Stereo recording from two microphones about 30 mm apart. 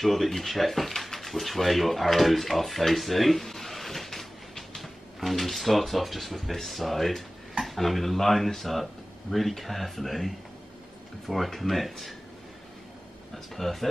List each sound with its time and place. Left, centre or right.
0.0 s speech: centre
13.3 s speech: centre